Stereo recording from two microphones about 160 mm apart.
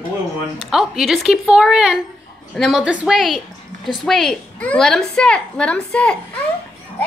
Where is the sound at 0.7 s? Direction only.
Centre (ahead or behind).